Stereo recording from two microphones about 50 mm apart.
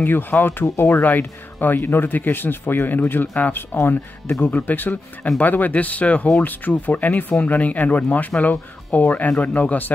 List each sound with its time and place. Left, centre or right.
0.0 s speech: left